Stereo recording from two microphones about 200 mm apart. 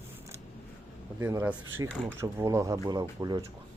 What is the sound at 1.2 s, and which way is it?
Speech, 10° right (ahead or behind).